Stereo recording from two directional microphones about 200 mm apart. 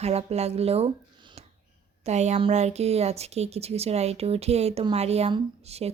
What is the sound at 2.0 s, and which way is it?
Speech, 35° right (ahead or behind).